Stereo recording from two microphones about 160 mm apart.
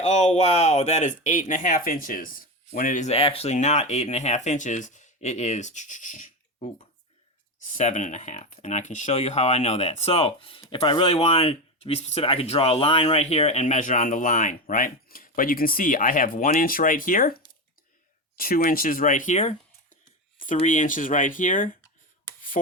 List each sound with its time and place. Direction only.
0.0 s speech: 45° left (ahead or behind); by 17.3 s 60° left (ahead or behind)
18.3 s speech: 60° left (ahead or behind)